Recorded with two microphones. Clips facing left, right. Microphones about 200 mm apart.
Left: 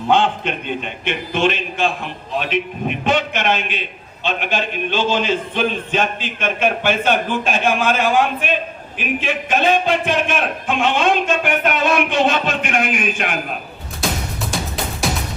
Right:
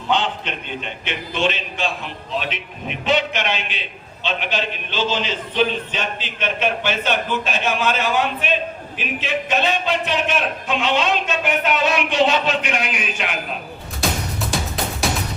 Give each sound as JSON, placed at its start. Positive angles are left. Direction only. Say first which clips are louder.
{"t": 0.1, "sound": "a man's voice", "louder": "left 5 dB", "side_deg": 50}
{"t": 15.0, "sound": "music", "louder": "left 1 dB", "side_deg": 0}